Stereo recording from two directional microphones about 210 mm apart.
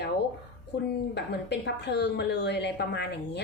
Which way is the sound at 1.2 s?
55° left (ahead or behind).